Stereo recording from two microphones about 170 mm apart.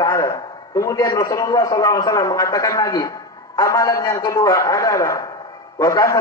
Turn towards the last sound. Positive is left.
turn(degrees=20)  # may be behind; listen again after turning